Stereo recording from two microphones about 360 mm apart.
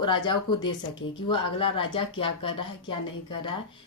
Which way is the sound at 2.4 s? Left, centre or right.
Left.